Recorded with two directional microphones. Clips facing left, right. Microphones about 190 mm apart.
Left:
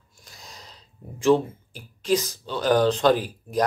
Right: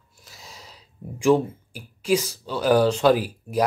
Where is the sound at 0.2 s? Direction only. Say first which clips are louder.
Right 1 dB; 5° right (ahead or behind).